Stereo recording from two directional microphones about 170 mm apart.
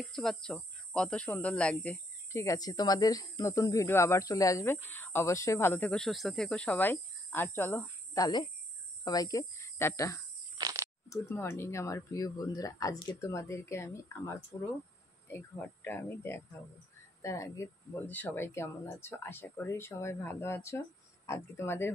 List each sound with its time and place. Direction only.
0.0 s speech: 5° left (ahead or behind)
10.6 s a sound: 20° right (ahead or behind)
11.1 s speech: 15° left (ahead or behind)